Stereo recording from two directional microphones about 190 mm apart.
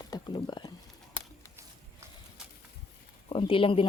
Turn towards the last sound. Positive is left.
turn(degrees=30)  # may be behind; listen again after turning